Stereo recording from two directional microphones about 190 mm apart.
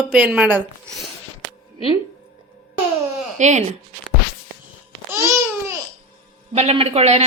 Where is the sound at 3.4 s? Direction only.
40° right (ahead or behind).